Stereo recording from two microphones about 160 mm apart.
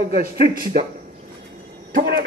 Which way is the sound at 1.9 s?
90° right.